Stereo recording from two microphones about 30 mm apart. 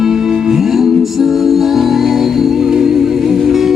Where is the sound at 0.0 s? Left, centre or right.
Centre.